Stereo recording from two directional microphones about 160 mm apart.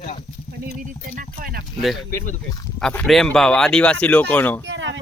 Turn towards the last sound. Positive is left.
turn(degrees=10)  # may be behind; listen again after turning